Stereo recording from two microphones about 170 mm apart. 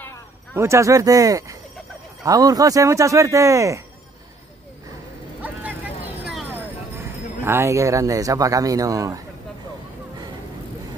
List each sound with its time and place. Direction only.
0.0 s a sound: 10° left (ahead or behind)
0.6 s speech: 15° right (ahead or behind)
5.4 s vehicle: 10° right (ahead or behind)
7.4 s speech: 15° right (ahead or behind)